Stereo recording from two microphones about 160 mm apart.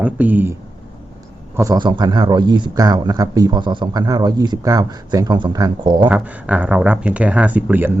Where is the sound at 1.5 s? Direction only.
25° right (ahead or behind).